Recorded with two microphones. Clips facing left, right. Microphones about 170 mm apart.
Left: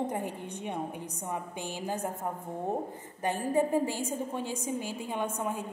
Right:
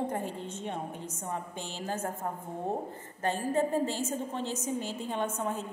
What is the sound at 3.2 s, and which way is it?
A woman's voice, 15° left (ahead or behind).